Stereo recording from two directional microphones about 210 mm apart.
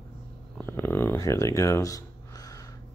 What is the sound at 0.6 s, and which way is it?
Speech, 10° left (ahead or behind).